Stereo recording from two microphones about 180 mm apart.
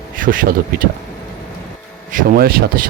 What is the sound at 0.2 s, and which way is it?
Speech, 50° right (ahead or behind).